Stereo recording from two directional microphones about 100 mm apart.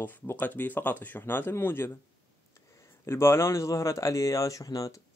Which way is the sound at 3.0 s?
25° left (ahead or behind).